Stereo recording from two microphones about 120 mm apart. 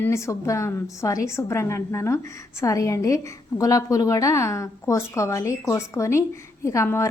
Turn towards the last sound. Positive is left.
turn(degrees=25)  # may be behind; listen again after turning